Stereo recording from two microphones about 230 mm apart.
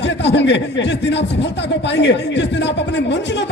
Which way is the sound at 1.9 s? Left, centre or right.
Left.